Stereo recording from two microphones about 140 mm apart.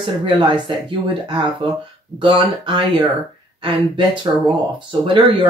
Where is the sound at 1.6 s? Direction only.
40° right (ahead or behind).